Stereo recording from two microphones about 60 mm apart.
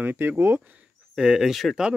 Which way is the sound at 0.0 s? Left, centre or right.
Right.